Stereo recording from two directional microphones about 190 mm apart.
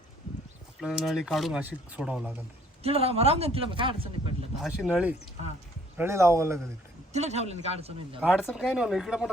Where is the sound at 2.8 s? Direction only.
30° right (ahead or behind).